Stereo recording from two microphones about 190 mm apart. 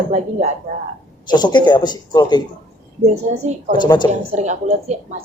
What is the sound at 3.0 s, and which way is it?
Speech, 35° right (ahead or behind).